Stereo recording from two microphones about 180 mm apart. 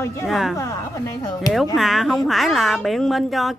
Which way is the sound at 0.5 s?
15° left (ahead or behind).